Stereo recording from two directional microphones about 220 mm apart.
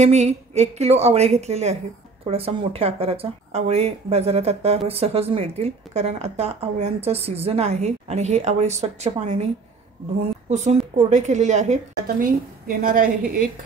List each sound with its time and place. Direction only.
0.0 s speech: 30° right (ahead or behind)
10.5 s a woman's voice: 30° right (ahead or behind)